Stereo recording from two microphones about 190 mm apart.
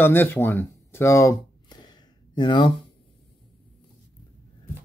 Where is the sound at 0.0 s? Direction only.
10° left (ahead or behind).